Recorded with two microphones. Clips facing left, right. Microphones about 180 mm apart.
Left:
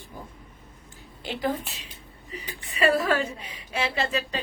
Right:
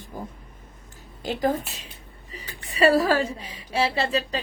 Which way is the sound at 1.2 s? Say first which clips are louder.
Right 4 dB; 40° right (ahead or behind).